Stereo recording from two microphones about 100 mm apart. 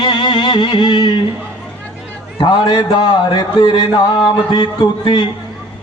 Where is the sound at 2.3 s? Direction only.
50° left (ahead or behind).